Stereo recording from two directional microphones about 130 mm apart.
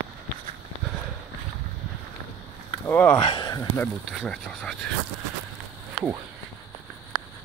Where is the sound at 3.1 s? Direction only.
40° left (ahead or behind).